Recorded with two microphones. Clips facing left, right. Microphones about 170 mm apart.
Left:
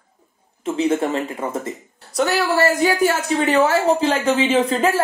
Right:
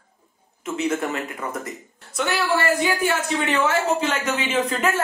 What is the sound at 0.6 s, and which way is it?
Speech, 30° left (ahead or behind).